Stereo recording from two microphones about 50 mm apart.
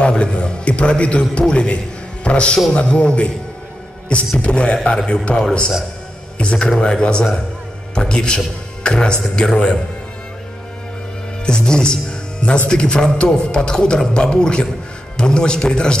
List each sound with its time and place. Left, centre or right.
0.0 s a man's voice: left
4.4 s a man's voice: left
11.4 s speech: centre